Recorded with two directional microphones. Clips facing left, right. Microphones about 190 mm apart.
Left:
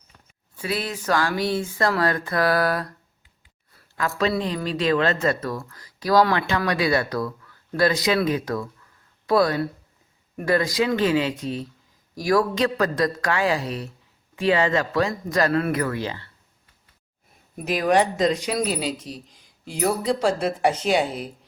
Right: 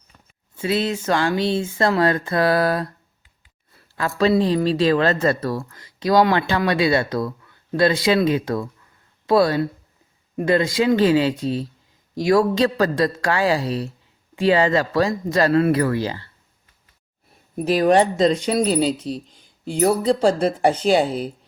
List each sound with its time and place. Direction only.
0.5 s speech: 25° right (ahead or behind)
3.9 s speech: 30° right (ahead or behind)
17.7 s speech: 30° right (ahead or behind)